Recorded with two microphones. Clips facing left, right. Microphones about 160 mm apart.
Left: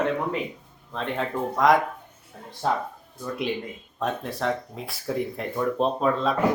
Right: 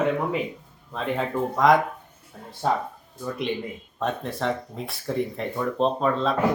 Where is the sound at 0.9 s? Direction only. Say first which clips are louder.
Right 2 dB; centre (ahead or behind).